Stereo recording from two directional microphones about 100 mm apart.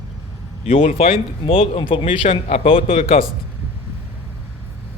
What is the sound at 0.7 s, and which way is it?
Speech, 85° left.